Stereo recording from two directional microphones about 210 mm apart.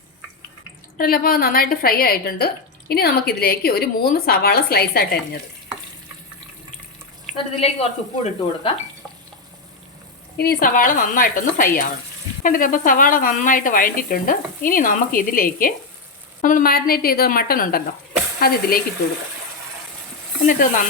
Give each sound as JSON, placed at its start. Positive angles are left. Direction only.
{"t": 0.9, "sound": "a woman's voice", "side_deg": 45}
{"t": 7.3, "sound": "a woman's voice", "side_deg": 25}
{"t": 10.3, "sound": "a woman's voice", "side_deg": 45}
{"t": 20.5, "sound": "speech", "side_deg": 40}